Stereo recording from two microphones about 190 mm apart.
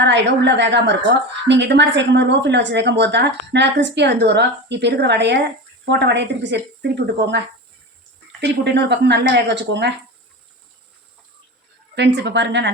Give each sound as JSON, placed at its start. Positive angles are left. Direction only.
{"t": 0.0, "sound": "a woman's voice", "side_deg": -65}
{"t": 11.9, "sound": "speech", "side_deg": -65}